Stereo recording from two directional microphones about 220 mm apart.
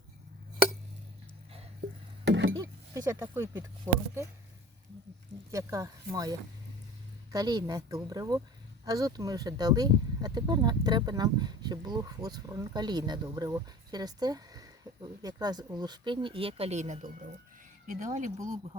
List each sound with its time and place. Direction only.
2.2 s a sound: 55° right (ahead or behind)
2.6 s speech: 15° right (ahead or behind)
5.5 s speech: 15° right (ahead or behind)
7.3 s speech: 15° right (ahead or behind); by 18.3 s 35° right (ahead or behind)